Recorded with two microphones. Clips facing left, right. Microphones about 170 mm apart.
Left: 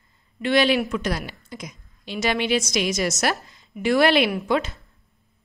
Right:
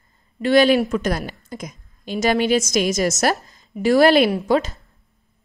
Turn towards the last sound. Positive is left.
turn(degrees=-40)  # may be behind; listen again after turning